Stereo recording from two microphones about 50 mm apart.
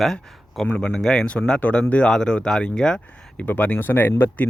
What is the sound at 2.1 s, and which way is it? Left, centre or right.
Speech, centre.